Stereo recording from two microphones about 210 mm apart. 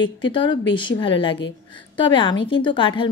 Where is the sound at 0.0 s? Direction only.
25° left (ahead or behind).